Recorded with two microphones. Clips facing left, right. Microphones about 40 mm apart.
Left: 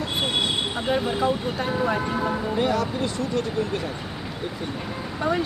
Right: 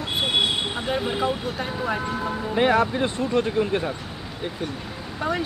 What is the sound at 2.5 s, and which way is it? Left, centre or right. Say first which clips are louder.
Speech: right 7 dB; right.